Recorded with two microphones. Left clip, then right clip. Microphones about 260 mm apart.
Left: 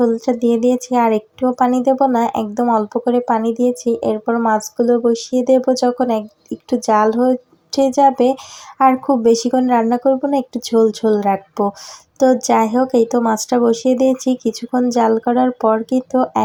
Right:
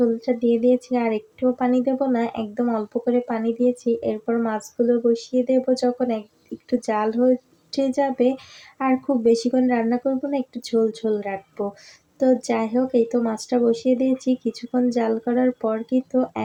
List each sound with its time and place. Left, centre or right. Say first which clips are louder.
0.3 s speech: left 4 dB; centre